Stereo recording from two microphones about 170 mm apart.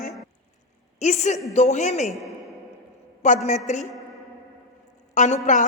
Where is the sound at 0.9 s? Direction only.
45° left (ahead or behind).